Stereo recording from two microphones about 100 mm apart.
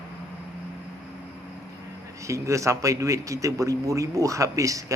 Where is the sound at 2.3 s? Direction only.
30° right (ahead or behind).